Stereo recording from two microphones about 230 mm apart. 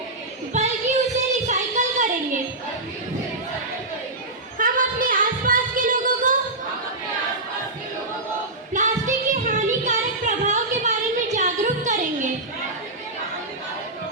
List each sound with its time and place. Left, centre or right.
0.5 s a sound: right
4.5 s music: right
8.7 s child singing: right